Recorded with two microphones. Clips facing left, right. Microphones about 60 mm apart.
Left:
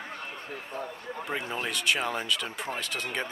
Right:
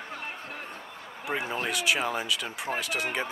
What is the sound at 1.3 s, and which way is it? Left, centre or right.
Speech, centre.